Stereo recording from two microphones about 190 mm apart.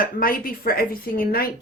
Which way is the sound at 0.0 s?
50° left (ahead or behind).